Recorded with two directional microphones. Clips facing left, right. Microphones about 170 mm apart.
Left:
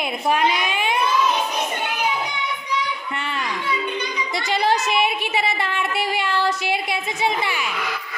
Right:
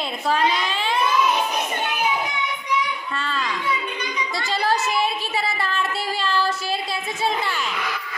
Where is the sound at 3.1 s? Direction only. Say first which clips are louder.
Even; 20° left (ahead or behind).